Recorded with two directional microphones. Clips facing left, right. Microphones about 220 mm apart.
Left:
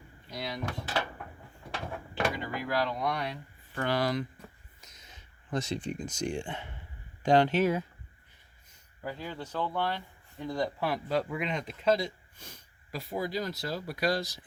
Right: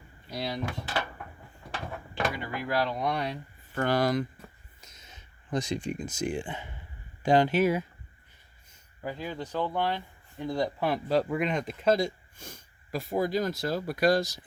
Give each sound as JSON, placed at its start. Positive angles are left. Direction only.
{"t": 0.3, "sound": "door", "side_deg": -30}
{"t": 1.7, "sound": "a sound", "side_deg": 0}
{"t": 2.7, "sound": "speech", "side_deg": -20}
{"t": 3.8, "sound": "speech", "side_deg": -45}
{"t": 4.8, "sound": "a sound", "side_deg": -25}
{"t": 7.2, "sound": "speech", "side_deg": -5}
{"t": 9.0, "sound": "speech", "side_deg": -15}
{"t": 11.1, "sound": "speech", "side_deg": -40}